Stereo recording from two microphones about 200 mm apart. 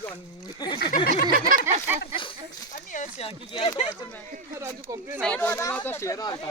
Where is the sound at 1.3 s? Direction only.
45° right (ahead or behind).